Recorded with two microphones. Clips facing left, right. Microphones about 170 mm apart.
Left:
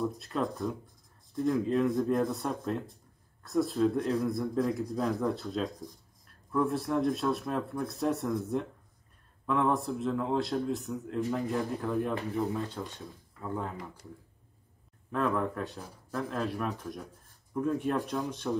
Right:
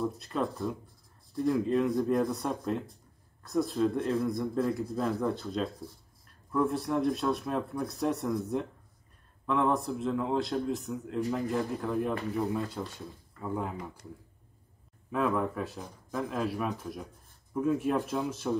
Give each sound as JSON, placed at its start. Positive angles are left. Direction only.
{"t": 0.0, "sound": "speech", "side_deg": 0}
{"t": 5.7, "sound": "speech", "side_deg": 15}
{"t": 6.2, "sound": "speech", "side_deg": 0}
{"t": 15.0, "sound": "speech", "side_deg": -5}